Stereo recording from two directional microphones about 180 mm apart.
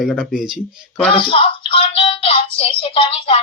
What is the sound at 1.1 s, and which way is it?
Music, 30° left (ahead or behind).